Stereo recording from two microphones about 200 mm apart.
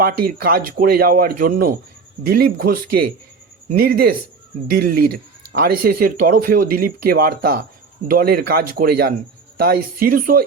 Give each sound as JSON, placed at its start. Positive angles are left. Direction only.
{"t": 0.0, "sound": "speech", "side_deg": -45}